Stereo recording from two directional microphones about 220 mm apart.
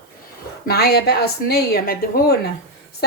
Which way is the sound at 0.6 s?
45° left (ahead or behind).